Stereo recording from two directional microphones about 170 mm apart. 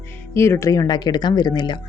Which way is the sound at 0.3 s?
15° left (ahead or behind).